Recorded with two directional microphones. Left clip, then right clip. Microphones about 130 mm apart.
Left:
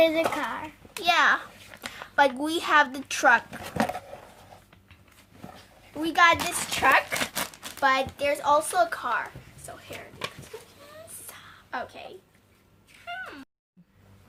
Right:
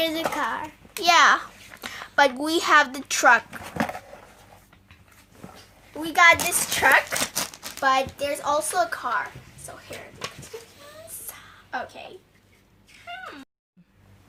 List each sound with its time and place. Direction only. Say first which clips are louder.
0.0 s a sound: left 2 dB; 80° right
1.0 s a child's voice: right 5 dB; 35° right (ahead or behind)
1.9 s speech: right 2 dB; 25° right (ahead or behind)
6.0 s a child's voice: right 4 dB; 20° right (ahead or behind)
7.2 s speech: right 2 dB; centre (ahead or behind)
10.5 s a sound: right 3 dB; centre (ahead or behind)